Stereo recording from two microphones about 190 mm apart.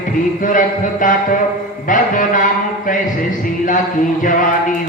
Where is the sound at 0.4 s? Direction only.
45° left (ahead or behind).